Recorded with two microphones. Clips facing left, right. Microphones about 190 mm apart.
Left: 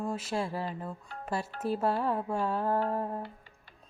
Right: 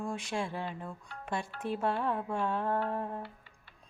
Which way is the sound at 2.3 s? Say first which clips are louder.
Left 2 dB; 5° left (ahead or behind).